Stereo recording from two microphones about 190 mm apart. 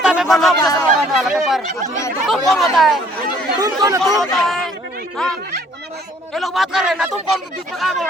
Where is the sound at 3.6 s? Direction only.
15° right (ahead or behind).